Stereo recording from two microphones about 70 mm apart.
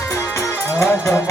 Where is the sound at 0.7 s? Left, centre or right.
Left.